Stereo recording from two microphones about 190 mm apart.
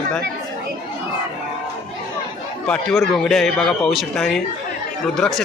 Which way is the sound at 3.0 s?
5° left (ahead or behind).